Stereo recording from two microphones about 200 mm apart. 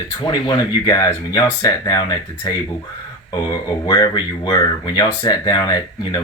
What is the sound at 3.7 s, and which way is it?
Speech, 20° left (ahead or behind).